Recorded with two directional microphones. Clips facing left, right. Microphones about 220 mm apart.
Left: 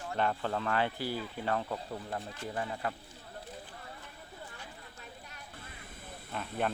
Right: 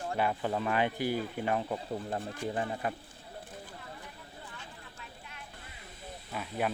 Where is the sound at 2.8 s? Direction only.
20° right (ahead or behind).